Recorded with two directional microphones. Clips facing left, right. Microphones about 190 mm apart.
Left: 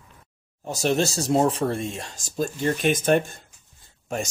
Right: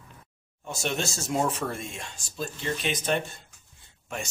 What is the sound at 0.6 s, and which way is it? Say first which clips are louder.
Speech: left 8 dB; 35° left (ahead or behind).